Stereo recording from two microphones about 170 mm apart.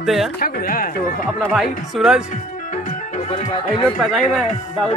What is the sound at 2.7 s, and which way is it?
Music, 45° left (ahead or behind).